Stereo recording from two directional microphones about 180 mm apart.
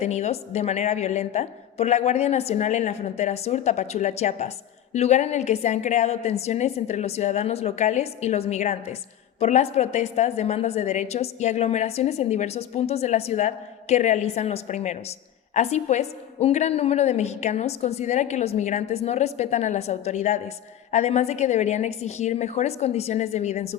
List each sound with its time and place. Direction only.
0.0 s a woman's voice: 40° left (ahead or behind)